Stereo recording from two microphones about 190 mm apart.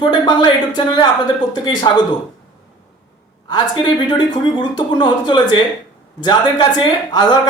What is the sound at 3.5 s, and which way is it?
A man's voice, 25° left (ahead or behind).